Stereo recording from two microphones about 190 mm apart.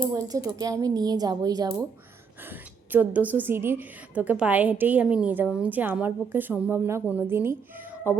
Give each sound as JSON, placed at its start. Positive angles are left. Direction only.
{"t": 0.1, "sound": "a woman's voice", "side_deg": -15}